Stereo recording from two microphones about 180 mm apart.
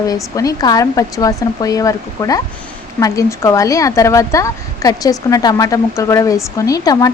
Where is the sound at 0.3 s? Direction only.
20° left (ahead or behind).